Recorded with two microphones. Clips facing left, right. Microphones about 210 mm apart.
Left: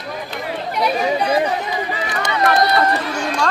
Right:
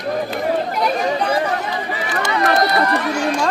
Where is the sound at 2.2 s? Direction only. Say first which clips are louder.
Left 1 dB; 25° left (ahead or behind).